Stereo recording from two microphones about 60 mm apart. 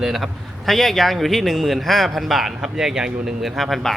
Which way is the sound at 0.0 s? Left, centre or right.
Centre.